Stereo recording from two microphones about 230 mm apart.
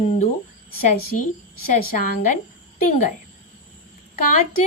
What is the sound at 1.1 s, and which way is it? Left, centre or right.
Speech, left.